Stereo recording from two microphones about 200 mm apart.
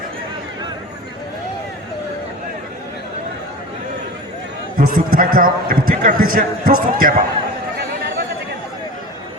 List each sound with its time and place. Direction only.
4.8 s a man's voice: 45° right (ahead or behind)